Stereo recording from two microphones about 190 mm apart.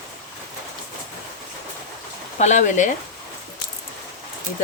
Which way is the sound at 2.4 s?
40° left (ahead or behind).